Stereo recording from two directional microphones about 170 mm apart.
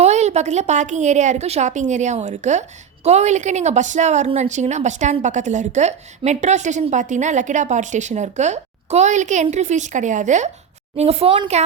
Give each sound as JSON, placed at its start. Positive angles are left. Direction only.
{"t": 0.0, "sound": "a woman's voice", "side_deg": -40}